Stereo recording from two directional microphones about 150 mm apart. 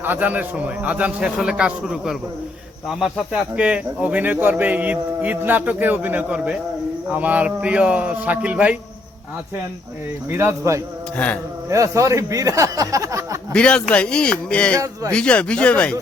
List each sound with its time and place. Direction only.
0.0 s speech: 10° right (ahead or behind)
10.2 s speech: 15° right (ahead or behind)
13.5 s speech: 5° left (ahead or behind)